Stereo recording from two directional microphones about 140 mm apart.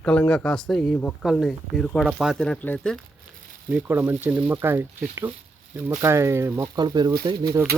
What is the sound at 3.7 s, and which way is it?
Speech, 15° right (ahead or behind).